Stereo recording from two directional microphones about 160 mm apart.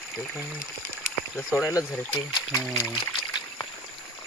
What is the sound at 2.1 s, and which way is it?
Speech, 20° left (ahead or behind).